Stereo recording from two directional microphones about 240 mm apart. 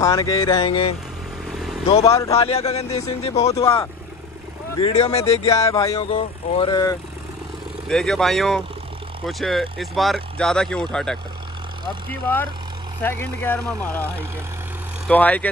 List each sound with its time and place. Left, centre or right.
0.0 s speech: centre
1.4 s vehicle: centre
2.0 s speech: centre
2.3 s speech: left
3.6 s speech: centre
4.7 s speech: left
7.9 s speech: centre